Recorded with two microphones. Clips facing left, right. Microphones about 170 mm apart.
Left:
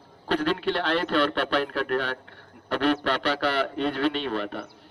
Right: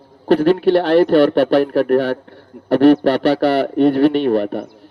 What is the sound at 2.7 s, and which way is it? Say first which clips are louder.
A man's voice: right 13 dB; 45° right (ahead or behind).